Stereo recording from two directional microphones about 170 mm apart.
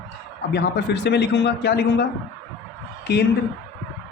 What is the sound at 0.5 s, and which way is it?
A man's voice, 80° left.